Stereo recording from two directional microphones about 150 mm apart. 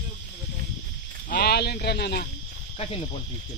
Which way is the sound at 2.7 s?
40° left (ahead or behind).